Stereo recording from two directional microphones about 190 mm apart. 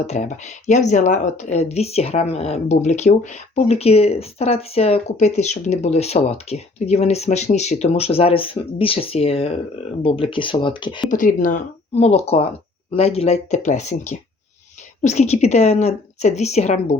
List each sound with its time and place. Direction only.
0.1 s speech: 40° left (ahead or behind)
11.1 s speech: 45° left (ahead or behind)